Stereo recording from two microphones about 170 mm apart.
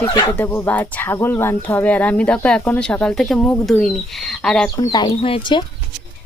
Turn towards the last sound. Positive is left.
turn(degrees=30)  # may be behind; listen again after turning